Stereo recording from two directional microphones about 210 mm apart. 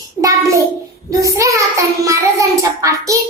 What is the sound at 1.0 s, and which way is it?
Child singing, 15° right (ahead or behind).